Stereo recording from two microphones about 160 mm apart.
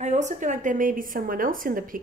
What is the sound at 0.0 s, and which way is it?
A woman's voice, 45° right (ahead or behind).